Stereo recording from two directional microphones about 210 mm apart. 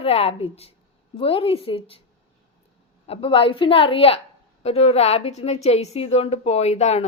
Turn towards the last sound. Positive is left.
turn(degrees=30)  # may be behind; listen again after turning